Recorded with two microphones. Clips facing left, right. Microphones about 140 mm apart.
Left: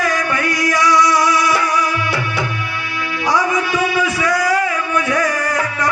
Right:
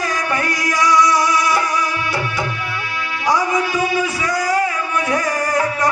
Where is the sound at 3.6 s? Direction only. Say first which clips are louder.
Left 1 dB; 45° right (ahead or behind).